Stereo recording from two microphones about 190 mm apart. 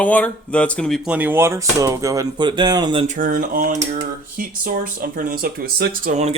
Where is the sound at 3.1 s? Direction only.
45° right (ahead or behind).